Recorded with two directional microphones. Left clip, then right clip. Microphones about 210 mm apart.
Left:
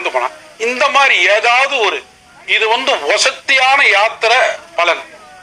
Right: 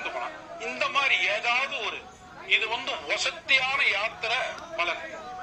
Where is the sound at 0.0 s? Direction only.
45° left (ahead or behind).